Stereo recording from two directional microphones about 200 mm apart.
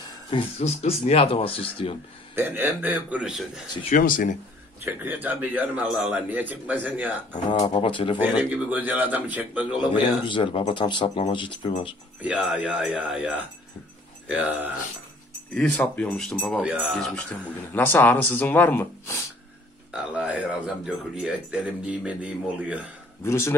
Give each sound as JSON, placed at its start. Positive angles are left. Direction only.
{"t": 0.3, "sound": "speech", "side_deg": 30}
{"t": 2.3, "sound": "speech", "side_deg": -10}
{"t": 3.9, "sound": "speech", "side_deg": 45}
{"t": 4.8, "sound": "speech", "side_deg": -10}
{"t": 7.5, "sound": "speech", "side_deg": 25}
{"t": 8.2, "sound": "speech", "side_deg": -10}
{"t": 10.2, "sound": "speech", "side_deg": 25}
{"t": 12.2, "sound": "speech", "side_deg": -5}
{"t": 15.5, "sound": "speech", "side_deg": 5}
{"t": 16.6, "sound": "speech", "side_deg": -5}
{"t": 17.1, "sound": "speech", "side_deg": 10}
{"t": 19.9, "sound": "speech", "side_deg": -5}
{"t": 23.2, "sound": "speech", "side_deg": 15}